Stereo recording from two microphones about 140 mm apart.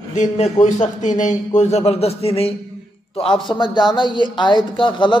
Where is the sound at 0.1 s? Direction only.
60° left (ahead or behind).